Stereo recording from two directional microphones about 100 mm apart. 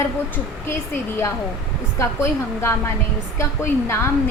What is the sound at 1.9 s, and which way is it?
A woman's voice, 25° left (ahead or behind).